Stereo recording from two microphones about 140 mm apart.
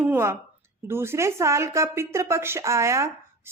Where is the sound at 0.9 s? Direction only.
20° right (ahead or behind).